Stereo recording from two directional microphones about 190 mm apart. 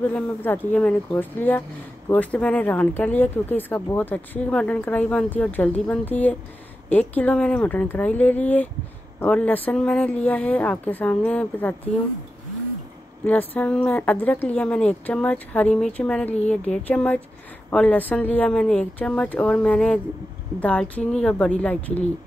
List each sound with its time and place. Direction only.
0.1 s speech: 10° left (ahead or behind)
13.2 s speech: 10° left (ahead or behind)